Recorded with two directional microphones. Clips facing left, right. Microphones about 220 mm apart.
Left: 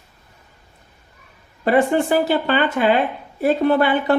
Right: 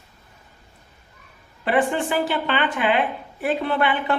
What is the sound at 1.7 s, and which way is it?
A woman's voice, 40° left (ahead or behind).